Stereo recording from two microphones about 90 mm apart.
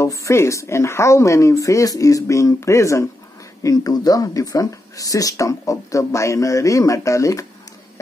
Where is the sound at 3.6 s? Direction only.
45° left (ahead or behind).